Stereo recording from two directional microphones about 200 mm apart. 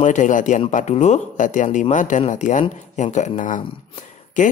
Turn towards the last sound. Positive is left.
turn(degrees=40)  # may be behind; listen again after turning